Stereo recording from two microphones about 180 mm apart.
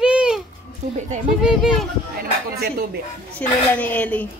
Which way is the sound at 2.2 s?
60° right (ahead or behind).